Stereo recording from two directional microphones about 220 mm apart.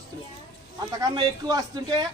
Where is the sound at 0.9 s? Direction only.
15° right (ahead or behind).